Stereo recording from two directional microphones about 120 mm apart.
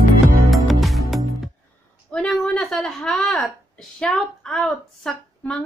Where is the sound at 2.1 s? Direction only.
5° left (ahead or behind).